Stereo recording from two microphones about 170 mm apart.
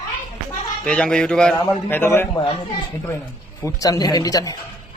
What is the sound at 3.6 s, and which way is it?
Speech, 20° left (ahead or behind).